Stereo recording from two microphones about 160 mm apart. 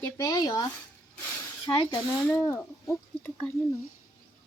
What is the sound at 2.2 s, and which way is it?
Speech, 15° left (ahead or behind).